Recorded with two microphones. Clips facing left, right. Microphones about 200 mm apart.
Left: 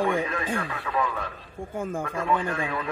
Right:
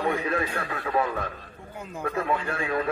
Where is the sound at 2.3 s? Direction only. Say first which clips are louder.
Left 4 dB; 45° right (ahead or behind).